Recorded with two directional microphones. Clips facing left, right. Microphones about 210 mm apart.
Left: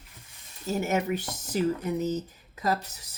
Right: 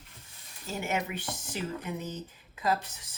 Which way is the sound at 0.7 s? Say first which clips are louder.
Left 6 dB; 40° left (ahead or behind).